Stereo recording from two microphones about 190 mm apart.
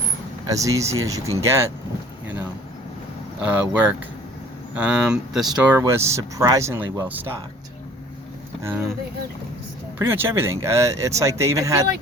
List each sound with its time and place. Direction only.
0.4 s speech: 15° right (ahead or behind)
3.5 s speech: 10° right (ahead or behind)
5.5 s speech: 15° right (ahead or behind)
8.6 s speech: 10° right (ahead or behind)
10.0 s speech: 10° right (ahead or behind)